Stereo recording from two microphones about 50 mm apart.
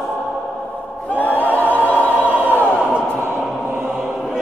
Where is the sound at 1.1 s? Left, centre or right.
Left.